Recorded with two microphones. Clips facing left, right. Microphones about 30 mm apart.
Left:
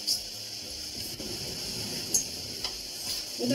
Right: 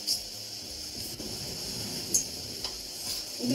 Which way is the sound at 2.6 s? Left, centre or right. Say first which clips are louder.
Left 2 dB; centre.